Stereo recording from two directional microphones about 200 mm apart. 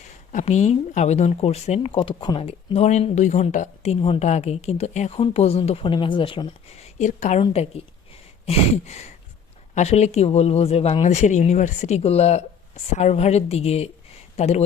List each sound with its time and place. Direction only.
0.3 s speech: 35° left (ahead or behind)